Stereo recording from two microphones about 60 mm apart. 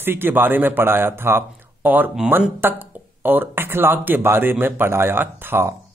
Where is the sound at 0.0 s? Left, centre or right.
Right.